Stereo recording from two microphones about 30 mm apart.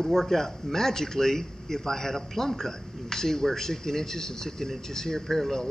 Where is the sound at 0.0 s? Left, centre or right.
Centre.